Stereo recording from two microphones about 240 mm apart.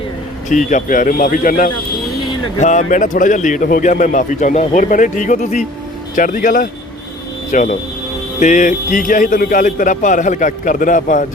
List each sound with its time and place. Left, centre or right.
0.4 s speech: left